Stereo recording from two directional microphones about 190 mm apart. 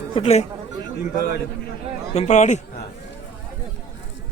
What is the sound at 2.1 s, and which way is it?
Speech, 35° left (ahead or behind).